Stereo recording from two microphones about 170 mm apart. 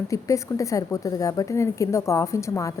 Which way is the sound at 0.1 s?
20° left (ahead or behind).